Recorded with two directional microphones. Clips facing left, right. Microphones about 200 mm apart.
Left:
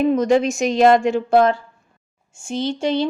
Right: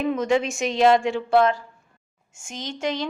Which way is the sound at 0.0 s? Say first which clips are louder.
Left 6 dB; 40° left (ahead or behind).